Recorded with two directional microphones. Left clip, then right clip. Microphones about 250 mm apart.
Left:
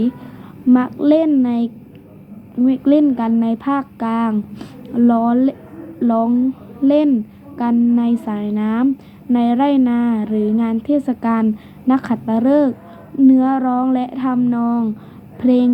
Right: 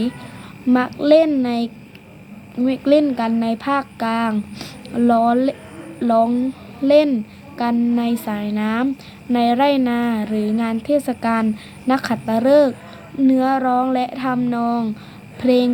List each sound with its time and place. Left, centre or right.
0.7 s speech: centre